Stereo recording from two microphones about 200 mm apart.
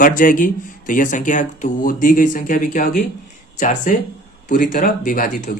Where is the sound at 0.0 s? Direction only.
40° left (ahead or behind).